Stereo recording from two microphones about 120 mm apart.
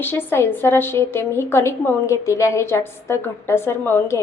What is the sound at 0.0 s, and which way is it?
A woman's voice, 20° left (ahead or behind).